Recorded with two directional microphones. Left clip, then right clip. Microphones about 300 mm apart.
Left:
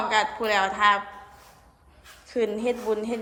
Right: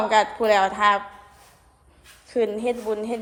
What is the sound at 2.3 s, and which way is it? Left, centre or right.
Speech, centre.